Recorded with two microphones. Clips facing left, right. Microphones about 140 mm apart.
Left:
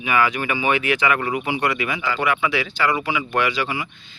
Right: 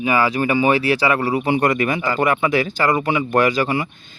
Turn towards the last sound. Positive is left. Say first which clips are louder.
# right 6 dB
turn(degrees=-45)  # may be behind; listen again after turning